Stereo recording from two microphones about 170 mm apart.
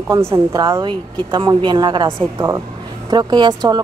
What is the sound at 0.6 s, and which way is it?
Speech, 25° right (ahead or behind).